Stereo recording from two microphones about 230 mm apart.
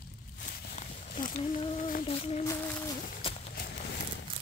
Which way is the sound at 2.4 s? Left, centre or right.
Centre.